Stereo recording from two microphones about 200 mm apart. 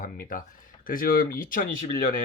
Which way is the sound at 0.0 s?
45° left (ahead or behind).